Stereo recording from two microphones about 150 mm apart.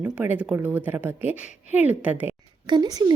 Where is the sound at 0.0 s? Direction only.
10° right (ahead or behind).